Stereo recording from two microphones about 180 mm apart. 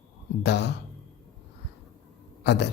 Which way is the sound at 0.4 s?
70° left (ahead or behind).